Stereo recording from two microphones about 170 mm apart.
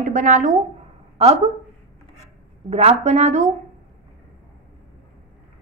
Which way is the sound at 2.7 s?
40° right (ahead or behind).